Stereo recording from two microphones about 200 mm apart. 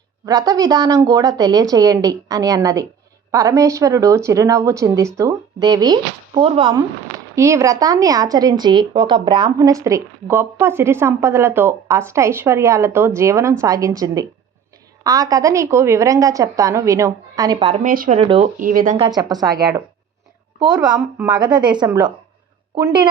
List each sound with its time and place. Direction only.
0.3 s a woman's voice: 20° right (ahead or behind)
17.7 s speech: 45° right (ahead or behind)
18.2 s speech: 30° right (ahead or behind)
18.6 s speech: 45° right (ahead or behind)
18.9 s speech: 20° right (ahead or behind)
20.9 s a woman's voice: 10° right (ahead or behind)
21.3 s speech: 20° right (ahead or behind)